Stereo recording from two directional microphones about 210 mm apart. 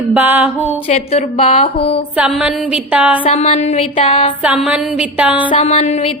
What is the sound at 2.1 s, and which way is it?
A woman's voice, 5° right (ahead or behind).